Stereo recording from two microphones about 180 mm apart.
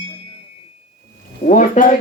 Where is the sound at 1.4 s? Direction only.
45° left (ahead or behind).